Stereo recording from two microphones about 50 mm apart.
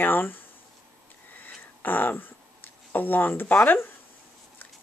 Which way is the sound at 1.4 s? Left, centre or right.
Left.